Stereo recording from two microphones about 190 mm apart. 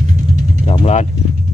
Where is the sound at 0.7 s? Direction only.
35° left (ahead or behind).